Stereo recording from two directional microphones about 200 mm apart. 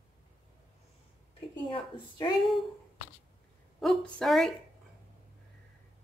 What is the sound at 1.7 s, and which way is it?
Speech, 20° left (ahead or behind).